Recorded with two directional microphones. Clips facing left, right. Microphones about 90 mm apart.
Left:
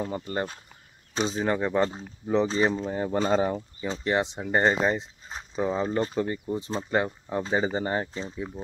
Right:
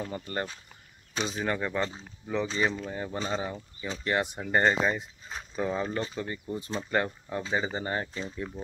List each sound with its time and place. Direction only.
0.0 s speech: 25° left (ahead or behind)
3.1 s speech: 45° left (ahead or behind); by 5.9 s 20° left (ahead or behind)
5.9 s speech: 35° left (ahead or behind)
8.4 s speech: 15° left (ahead or behind)